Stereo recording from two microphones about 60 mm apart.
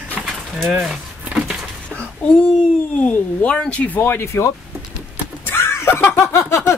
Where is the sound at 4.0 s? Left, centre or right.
Left.